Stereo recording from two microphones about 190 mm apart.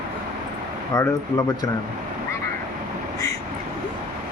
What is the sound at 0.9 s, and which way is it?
Speech, 15° left (ahead or behind).